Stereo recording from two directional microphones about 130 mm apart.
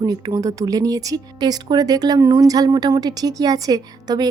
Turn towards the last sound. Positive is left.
turn(degrees=-30)  # may be behind; listen again after turning